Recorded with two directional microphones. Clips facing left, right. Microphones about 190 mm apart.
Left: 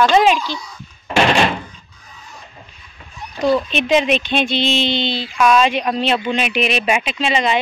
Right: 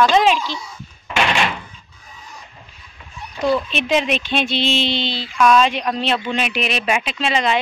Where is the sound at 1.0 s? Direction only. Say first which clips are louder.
Left 5 dB; 40° left (ahead or behind).